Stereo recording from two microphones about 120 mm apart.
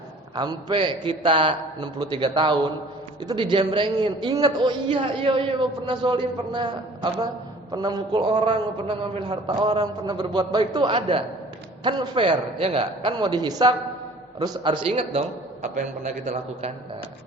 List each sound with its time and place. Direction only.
0.3 s a man's voice: 40° right (ahead or behind)
15.6 s a man's voice: 90° right; by 16.7 s 70° right (ahead or behind)